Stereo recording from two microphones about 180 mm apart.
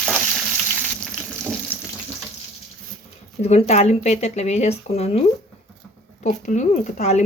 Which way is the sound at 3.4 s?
35° left (ahead or behind).